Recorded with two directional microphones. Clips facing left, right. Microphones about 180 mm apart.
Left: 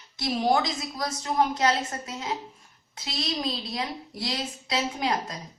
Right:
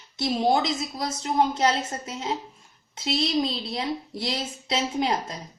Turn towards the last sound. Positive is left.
turn(degrees=-25)  # may be behind; listen again after turning